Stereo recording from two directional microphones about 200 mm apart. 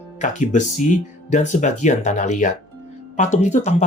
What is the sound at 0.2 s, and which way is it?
Speech, 40° left (ahead or behind).